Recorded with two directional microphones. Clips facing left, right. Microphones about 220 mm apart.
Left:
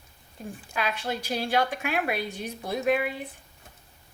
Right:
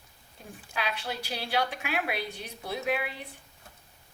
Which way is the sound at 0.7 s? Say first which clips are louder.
Left 4 dB; 50° left (ahead or behind).